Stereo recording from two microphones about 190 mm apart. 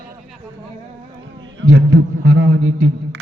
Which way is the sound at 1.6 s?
90° right.